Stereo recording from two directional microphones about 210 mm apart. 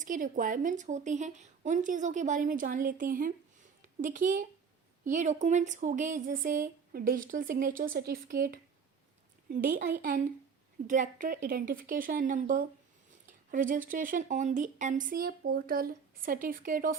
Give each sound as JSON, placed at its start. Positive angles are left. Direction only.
{"t": 0.0, "sound": "a woman's voice", "side_deg": -40}